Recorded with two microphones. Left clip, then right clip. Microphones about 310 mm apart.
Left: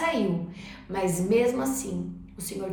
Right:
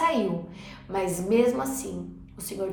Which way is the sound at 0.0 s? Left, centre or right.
Centre.